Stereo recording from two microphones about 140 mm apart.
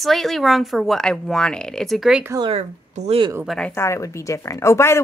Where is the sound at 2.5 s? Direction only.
50° right (ahead or behind).